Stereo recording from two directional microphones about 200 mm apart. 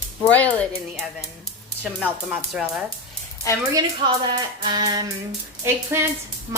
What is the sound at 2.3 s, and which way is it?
Speech, 5° right (ahead or behind).